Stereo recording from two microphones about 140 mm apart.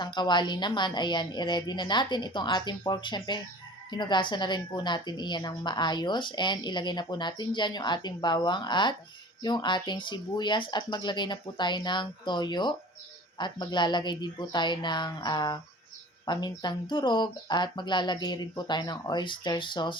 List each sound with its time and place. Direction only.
0.0 s a woman's voice: 35° left (ahead or behind)